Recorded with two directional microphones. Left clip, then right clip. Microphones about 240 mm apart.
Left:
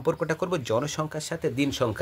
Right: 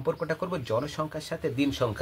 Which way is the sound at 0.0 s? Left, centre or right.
Left.